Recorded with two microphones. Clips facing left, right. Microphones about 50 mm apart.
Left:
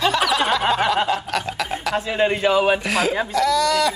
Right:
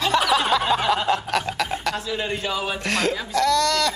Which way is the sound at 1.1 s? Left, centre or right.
Centre.